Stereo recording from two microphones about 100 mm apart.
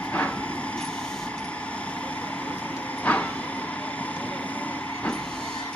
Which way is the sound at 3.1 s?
15° left (ahead or behind).